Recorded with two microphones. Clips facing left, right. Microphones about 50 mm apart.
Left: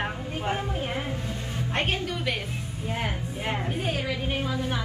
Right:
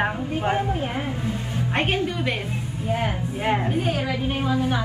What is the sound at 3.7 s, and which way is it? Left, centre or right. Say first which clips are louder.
A woman's voice: right 5 dB; right.